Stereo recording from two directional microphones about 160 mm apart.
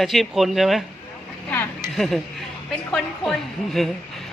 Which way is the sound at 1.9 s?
Centre (ahead or behind).